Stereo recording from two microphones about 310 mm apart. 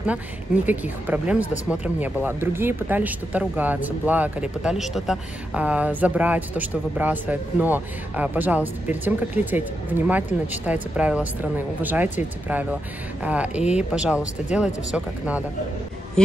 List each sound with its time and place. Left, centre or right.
0.7 s speech: centre
13.2 s speech: centre